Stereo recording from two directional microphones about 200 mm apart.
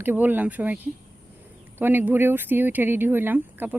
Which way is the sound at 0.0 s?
10° right (ahead or behind).